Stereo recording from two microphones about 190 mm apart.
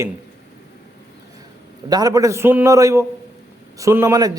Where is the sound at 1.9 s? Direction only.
20° right (ahead or behind).